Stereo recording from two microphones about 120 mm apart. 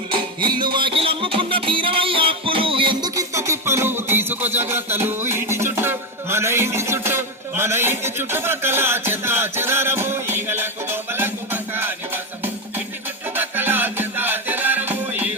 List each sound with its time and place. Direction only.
0.4 s music: 40° right (ahead or behind)
3.2 s music: 25° right (ahead or behind)
13.3 s music: 15° right (ahead or behind)